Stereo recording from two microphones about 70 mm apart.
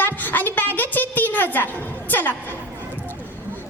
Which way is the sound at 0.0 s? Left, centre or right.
Left.